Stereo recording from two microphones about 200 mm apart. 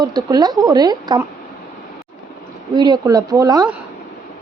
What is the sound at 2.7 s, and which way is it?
Speech, 20° right (ahead or behind).